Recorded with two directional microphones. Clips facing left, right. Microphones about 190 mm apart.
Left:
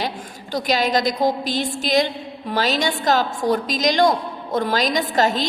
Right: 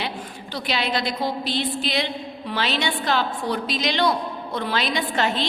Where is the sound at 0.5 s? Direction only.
40° left (ahead or behind).